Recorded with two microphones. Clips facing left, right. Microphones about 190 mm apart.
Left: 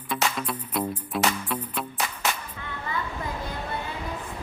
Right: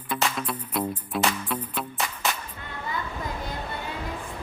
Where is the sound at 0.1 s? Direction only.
Centre (ahead or behind).